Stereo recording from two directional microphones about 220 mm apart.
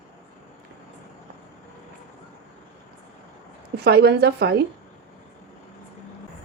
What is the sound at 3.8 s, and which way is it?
Speech, 50° right (ahead or behind).